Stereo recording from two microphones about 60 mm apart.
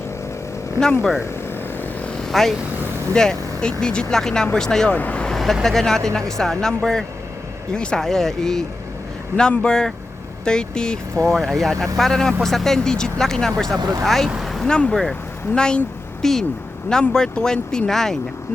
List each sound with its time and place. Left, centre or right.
2.2 s speech: centre
4.9 s speech: left
5.6 s speech: centre
9.3 s speech: centre
11.3 s speech: centre
13.7 s speech: right
14.0 s speech: centre
14.3 s vehicle: centre
14.7 s speech: centre